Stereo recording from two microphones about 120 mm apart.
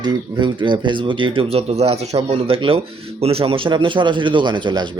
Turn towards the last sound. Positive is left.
turn(degrees=-40)  # may be behind; listen again after turning